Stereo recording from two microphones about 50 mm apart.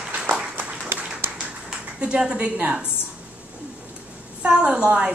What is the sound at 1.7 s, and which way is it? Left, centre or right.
Speech, right.